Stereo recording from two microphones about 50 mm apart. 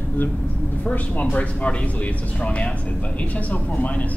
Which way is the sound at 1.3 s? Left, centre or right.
Left.